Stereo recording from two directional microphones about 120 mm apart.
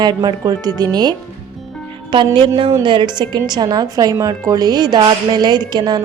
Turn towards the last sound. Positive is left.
turn(degrees=-35)  # may be behind; listen again after turning